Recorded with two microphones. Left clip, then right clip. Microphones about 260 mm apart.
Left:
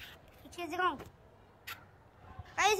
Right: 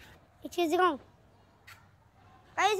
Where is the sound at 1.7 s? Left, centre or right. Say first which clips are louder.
Left 7 dB; left.